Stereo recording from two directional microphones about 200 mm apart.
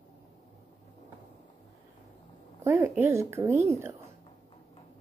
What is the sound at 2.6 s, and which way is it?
Speech, 10° right (ahead or behind).